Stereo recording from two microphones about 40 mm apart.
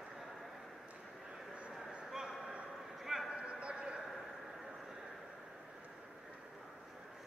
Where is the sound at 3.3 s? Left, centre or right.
Right.